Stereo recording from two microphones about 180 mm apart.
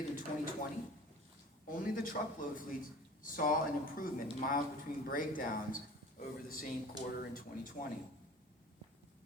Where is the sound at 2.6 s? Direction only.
50° left (ahead or behind).